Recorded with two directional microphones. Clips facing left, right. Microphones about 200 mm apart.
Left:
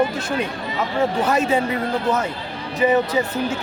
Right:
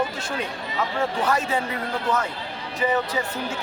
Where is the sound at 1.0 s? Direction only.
25° left (ahead or behind).